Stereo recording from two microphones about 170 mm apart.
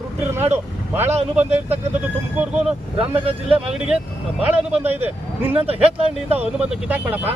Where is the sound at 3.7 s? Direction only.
5° right (ahead or behind).